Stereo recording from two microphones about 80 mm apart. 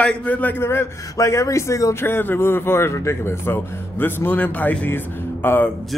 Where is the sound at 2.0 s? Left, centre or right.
Left.